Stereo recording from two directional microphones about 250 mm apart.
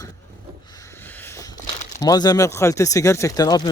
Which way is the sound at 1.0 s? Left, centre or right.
Centre.